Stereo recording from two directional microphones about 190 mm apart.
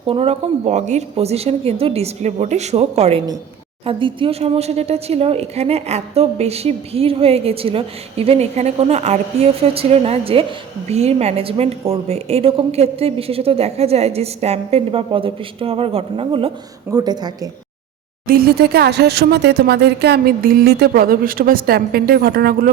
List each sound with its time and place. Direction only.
0.0 s a woman's voice: 30° right (ahead or behind)
18.3 s speech: 55° right (ahead or behind)